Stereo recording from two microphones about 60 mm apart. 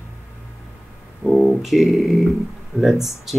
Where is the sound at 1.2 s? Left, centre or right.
Centre.